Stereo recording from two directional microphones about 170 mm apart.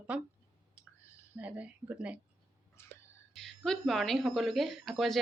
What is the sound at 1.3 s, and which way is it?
Speech, 10° right (ahead or behind).